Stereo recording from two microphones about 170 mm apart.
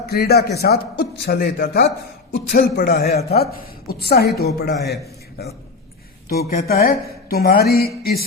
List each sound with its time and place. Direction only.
0.0 s a man's voice: 70° left (ahead or behind)
2.3 s a man's voice: 80° left; by 7.9 s 65° left (ahead or behind)